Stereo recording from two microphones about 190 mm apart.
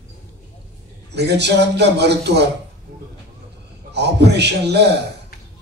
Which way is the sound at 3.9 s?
60° right (ahead or behind).